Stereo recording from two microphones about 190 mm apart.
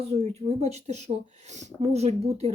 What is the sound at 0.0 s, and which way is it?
Speech, 35° right (ahead or behind).